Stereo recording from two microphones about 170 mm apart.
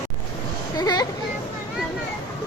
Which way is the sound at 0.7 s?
25° left (ahead or behind).